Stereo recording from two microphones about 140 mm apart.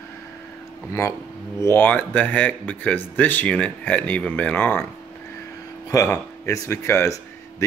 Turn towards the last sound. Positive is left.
turn(degrees=20)  # may be behind; listen again after turning